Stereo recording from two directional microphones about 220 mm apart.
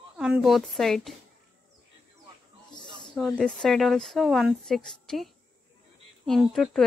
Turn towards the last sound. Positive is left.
turn(degrees=0)  # may be behind; listen again after turning